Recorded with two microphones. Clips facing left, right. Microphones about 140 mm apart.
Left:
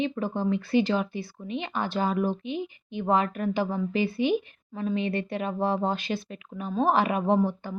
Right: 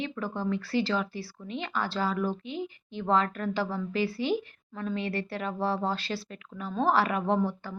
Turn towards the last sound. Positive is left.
turn(degrees=15)  # may be behind; listen again after turning